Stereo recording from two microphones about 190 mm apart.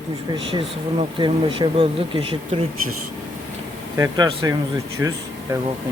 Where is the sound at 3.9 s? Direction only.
20° right (ahead or behind).